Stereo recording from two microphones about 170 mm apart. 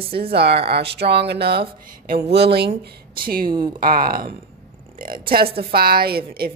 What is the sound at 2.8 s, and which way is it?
A woman's voice, 60° right (ahead or behind).